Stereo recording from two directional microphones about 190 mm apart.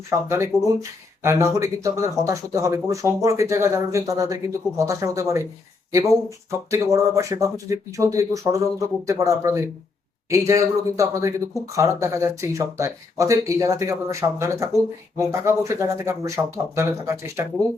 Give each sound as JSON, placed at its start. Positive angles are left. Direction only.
{"t": 0.3, "sound": "speech", "side_deg": -15}
{"t": 6.7, "sound": "speech", "side_deg": -15}